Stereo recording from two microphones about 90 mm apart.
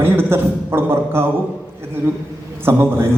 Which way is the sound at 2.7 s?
25° right (ahead or behind).